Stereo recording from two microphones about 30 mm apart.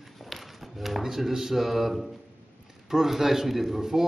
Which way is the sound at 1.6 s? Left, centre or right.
Centre.